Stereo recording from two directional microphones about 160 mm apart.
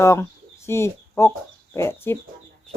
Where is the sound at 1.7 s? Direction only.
15° left (ahead or behind).